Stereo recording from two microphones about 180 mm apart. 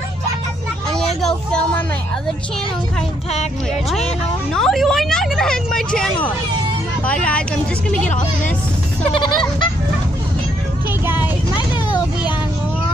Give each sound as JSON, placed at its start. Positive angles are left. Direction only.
{"t": 0.9, "sound": "a sound", "side_deg": 0}
{"t": 4.6, "sound": "a woman's voice", "side_deg": 0}
{"t": 7.1, "sound": "speech", "side_deg": 5}
{"t": 9.1, "sound": "speech", "side_deg": 25}